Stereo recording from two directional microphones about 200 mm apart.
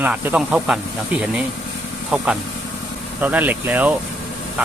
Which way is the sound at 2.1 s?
5° right (ahead or behind).